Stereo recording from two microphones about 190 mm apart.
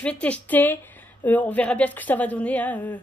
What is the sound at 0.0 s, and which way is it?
Speech, 5° left (ahead or behind).